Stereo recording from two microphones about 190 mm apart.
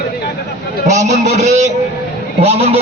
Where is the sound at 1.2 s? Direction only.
40° right (ahead or behind).